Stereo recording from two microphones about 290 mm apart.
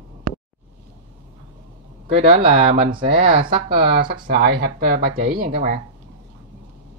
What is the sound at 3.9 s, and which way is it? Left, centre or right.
Speech, right.